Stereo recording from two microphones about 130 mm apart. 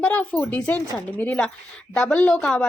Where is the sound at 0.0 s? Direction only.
10° left (ahead or behind).